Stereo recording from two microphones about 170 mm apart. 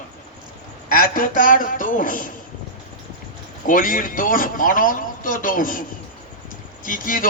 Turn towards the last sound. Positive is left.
turn(degrees=55)  # may be behind; listen again after turning